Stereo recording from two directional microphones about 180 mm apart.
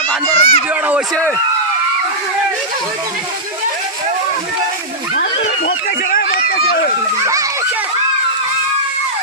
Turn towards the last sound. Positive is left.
turn(degrees=-20)  # may be behind; listen again after turning